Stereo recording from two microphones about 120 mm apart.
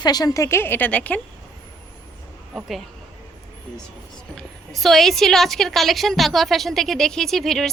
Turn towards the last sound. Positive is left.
turn(degrees=5)  # may be behind; listen again after turning